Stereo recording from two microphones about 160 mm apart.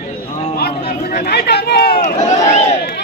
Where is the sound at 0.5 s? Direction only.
80° left.